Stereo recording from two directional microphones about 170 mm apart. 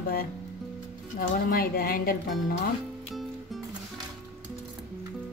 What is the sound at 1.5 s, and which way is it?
Speech, 60° left (ahead or behind).